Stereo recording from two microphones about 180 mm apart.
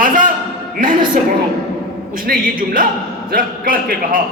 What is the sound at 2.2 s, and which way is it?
A man's voice, 50° right (ahead or behind).